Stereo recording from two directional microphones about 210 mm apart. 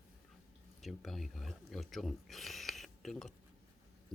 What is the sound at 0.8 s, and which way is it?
Speech, centre (ahead or behind).